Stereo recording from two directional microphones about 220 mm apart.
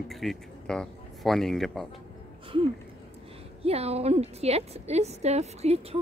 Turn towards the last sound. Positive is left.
turn(degrees=-30)  # may be behind; listen again after turning